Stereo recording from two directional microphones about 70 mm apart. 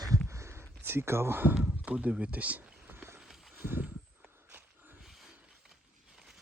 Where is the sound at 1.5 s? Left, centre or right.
Centre; by 3.1 s right.